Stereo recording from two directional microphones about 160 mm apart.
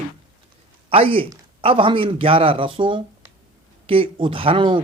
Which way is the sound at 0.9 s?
35° right (ahead or behind).